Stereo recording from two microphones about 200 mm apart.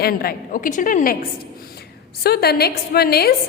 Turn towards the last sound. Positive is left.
turn(degrees=50)  # may be behind; listen again after turning